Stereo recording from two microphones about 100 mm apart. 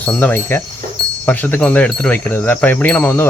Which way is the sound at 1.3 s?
20° left (ahead or behind).